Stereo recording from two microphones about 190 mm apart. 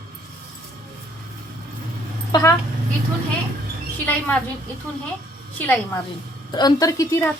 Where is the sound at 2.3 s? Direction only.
15° left (ahead or behind).